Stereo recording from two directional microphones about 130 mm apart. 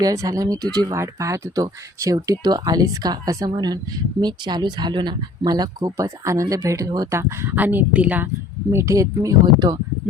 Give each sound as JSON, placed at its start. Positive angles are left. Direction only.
{"t": 0.0, "sound": "speech", "side_deg": -25}
{"t": 7.2, "sound": "speech", "side_deg": -20}
{"t": 8.7, "sound": "speech", "side_deg": -25}